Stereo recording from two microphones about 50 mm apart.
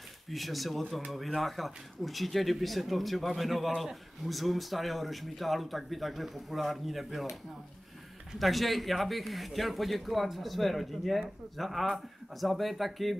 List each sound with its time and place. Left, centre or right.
0.3 s speech: centre